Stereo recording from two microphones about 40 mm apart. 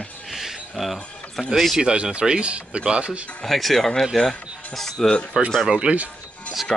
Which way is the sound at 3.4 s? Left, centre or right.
Centre.